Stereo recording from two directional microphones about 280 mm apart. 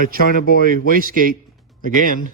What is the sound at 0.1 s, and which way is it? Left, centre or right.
A man's voice, right.